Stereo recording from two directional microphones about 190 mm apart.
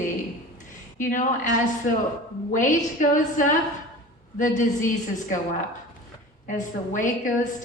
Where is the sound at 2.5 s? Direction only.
40° left (ahead or behind).